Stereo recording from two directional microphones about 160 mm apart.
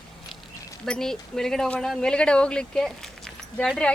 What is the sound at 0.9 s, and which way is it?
Speech, 5° left (ahead or behind).